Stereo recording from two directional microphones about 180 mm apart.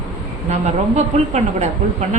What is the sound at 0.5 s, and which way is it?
A woman's voice, 40° right (ahead or behind).